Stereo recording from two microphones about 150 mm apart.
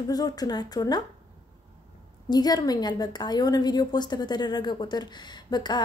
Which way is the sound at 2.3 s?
25° left (ahead or behind).